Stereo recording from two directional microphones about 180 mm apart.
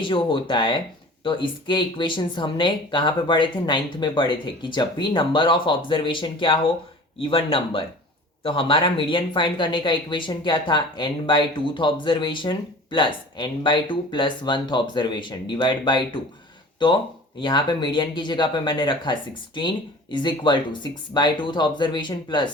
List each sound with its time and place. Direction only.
0.0 s speech: 30° left (ahead or behind)